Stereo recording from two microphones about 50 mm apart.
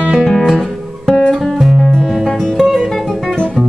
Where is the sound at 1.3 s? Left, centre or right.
Centre.